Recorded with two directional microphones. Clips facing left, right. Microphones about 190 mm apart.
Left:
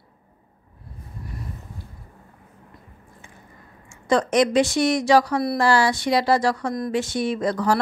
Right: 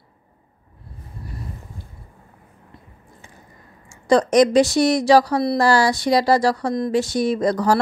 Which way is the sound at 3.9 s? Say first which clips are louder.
Right 4 dB; 40° right (ahead or behind).